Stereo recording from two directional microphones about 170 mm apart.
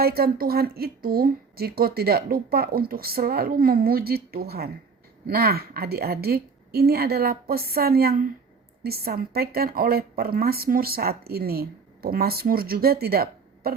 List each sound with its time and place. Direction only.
0.0 s a woman's voice: 65° right (ahead or behind)